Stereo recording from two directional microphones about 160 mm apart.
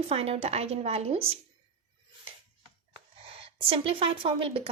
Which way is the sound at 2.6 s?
35° right (ahead or behind).